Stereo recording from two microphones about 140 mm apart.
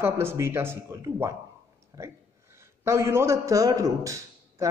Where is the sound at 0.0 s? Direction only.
15° right (ahead or behind).